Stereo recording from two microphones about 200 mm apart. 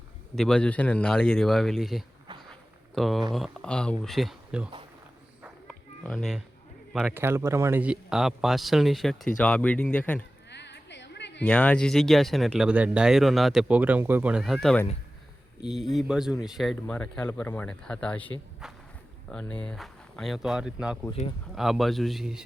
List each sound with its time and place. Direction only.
0.3 s speech: 5° left (ahead or behind)
5.6 s a sound: 5° left (ahead or behind)
6.9 s speech: 10° right (ahead or behind); by 10.2 s 5° left (ahead or behind)
10.5 s a sound: 60° left (ahead or behind)
11.4 s speech: 5° left (ahead or behind)
18.6 s walk: 5° right (ahead or behind)
19.3 s speech: 5° left (ahead or behind)